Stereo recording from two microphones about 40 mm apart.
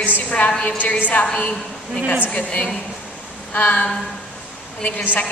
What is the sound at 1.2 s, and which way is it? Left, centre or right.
A woman's voice, left.